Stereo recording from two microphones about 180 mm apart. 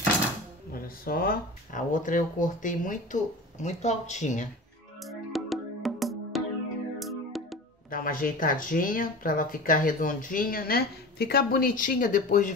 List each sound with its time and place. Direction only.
0.7 s speech: 55° left (ahead or behind)
5.0 s music: centre (ahead or behind)
7.9 s speech: 50° left (ahead or behind)